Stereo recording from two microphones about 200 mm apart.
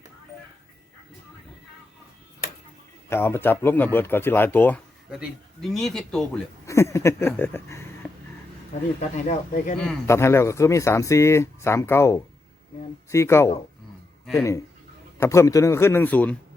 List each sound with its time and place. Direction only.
3.1 s speech: 10° left (ahead or behind)
6.7 s speech: 15° left (ahead or behind)
9.0 s speech: 35° left (ahead or behind)
9.7 s speech: 5° left (ahead or behind)
10.1 s speech: 15° left (ahead or behind)